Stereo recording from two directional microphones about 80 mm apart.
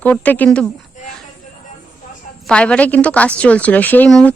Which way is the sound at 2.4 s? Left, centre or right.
Centre.